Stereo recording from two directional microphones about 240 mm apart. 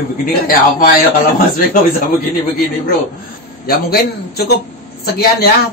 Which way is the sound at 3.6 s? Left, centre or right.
Left.